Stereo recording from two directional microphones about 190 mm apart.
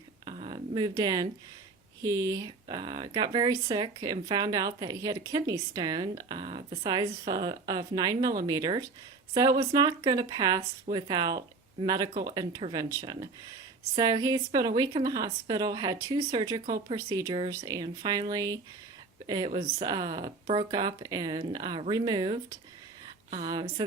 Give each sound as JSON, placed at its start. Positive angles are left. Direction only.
{"t": 0.3, "sound": "a sound", "side_deg": -30}
{"t": 2.0, "sound": "speech", "side_deg": -20}
{"t": 19.8, "sound": "speech", "side_deg": -20}
{"t": 23.5, "sound": "speech", "side_deg": -25}